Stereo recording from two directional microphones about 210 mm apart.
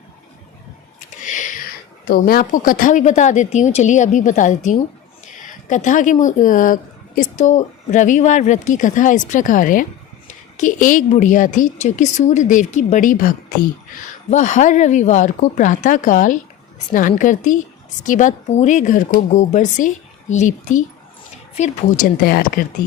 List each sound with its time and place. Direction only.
1.2 s a woman's voice: 35° left (ahead or behind)